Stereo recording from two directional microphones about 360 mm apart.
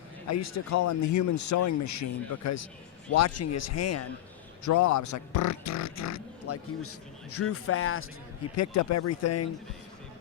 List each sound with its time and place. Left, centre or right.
0.3 s speech: left
8.5 s speech: left